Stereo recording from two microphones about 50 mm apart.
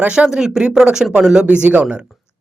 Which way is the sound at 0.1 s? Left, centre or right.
Centre.